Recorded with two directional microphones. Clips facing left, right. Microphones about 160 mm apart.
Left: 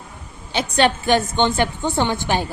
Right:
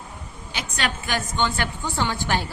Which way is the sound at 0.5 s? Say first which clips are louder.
Left 11 dB; 30° left (ahead or behind).